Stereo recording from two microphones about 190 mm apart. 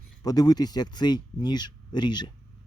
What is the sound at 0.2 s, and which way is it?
Speech, 20° left (ahead or behind).